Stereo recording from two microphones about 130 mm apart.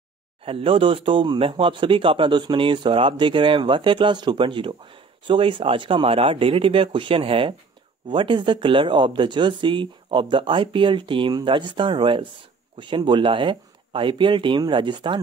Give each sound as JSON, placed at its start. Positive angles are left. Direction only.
{"t": 0.5, "sound": "speech", "side_deg": -45}